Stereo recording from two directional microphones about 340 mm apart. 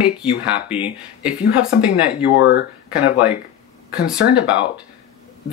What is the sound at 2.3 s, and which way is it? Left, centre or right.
Speech, left.